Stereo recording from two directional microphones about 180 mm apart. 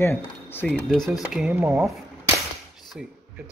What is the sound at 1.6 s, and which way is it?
Speech, 15° right (ahead or behind).